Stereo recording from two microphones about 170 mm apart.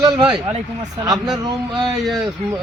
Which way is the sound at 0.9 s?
20° right (ahead or behind).